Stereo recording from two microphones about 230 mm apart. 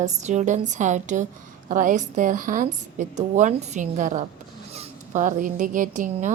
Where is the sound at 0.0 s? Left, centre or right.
Right.